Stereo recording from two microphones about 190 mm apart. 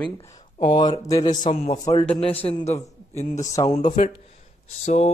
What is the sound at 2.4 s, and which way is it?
A man's voice, 30° left (ahead or behind).